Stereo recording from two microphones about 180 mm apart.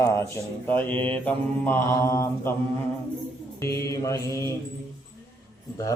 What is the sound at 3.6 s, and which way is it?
Speech, 15° left (ahead or behind).